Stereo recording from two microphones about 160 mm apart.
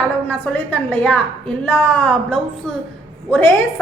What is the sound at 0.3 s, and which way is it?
A woman's voice, 10° left (ahead or behind).